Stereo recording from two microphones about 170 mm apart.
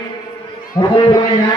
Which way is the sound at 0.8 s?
25° left (ahead or behind).